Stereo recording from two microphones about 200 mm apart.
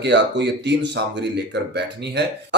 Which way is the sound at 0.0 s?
60° right (ahead or behind).